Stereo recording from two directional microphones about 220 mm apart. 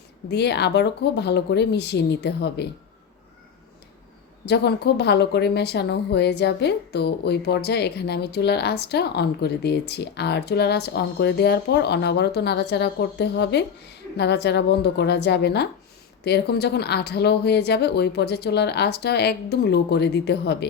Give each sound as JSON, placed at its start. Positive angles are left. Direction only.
{"t": 0.3, "sound": "a woman's voice", "side_deg": 50}
{"t": 4.4, "sound": "a woman's voice", "side_deg": 50}